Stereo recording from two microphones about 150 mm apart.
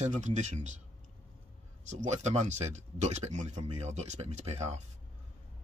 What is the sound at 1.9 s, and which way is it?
Speech, 50° right (ahead or behind).